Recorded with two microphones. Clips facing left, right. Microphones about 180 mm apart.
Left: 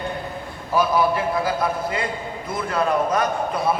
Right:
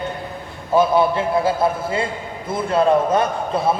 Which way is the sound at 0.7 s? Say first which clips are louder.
Right 4 dB; 25° right (ahead or behind).